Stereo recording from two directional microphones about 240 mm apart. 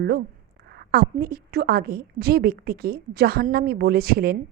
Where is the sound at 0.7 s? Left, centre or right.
Right.